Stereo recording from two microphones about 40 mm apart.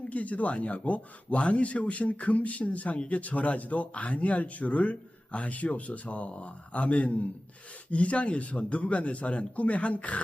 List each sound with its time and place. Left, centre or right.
0.0 s a man's voice: left